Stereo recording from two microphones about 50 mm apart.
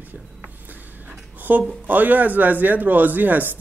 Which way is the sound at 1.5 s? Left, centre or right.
Right.